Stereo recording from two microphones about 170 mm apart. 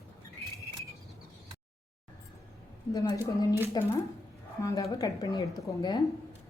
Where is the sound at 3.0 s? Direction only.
20° left (ahead or behind).